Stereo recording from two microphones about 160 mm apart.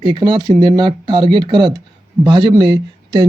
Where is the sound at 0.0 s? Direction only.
30° right (ahead or behind).